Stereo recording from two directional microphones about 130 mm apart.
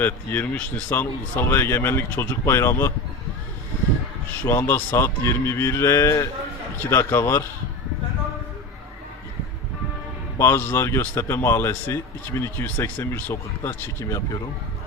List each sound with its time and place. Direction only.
0.0 s speech: 15° left (ahead or behind)
4.4 s a man's voice: 20° left (ahead or behind)
10.3 s a man's voice: 20° left (ahead or behind)